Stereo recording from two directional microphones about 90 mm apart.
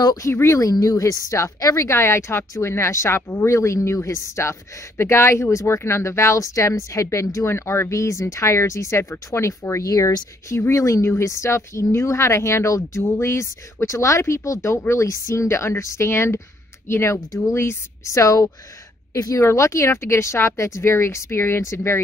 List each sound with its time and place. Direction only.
0.0 s speech: 45° left (ahead or behind)
0.3 s speech: 30° left (ahead or behind)